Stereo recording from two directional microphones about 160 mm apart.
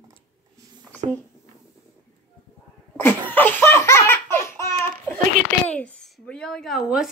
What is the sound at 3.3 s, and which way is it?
Laughter, 10° left (ahead or behind).